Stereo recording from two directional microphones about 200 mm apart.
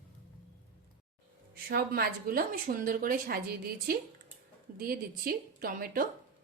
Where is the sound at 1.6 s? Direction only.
50° right (ahead or behind).